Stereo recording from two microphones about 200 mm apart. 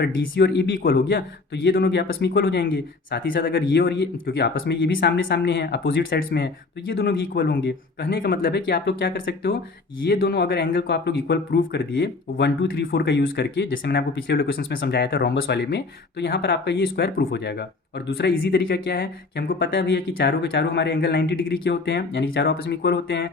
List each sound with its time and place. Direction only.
0.0 s speech: 55° left (ahead or behind)